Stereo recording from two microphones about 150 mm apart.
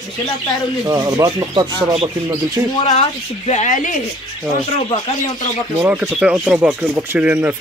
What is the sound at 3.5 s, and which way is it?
Speech, 55° left (ahead or behind).